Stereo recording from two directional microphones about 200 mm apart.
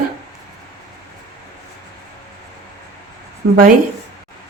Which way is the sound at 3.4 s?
65° right (ahead or behind).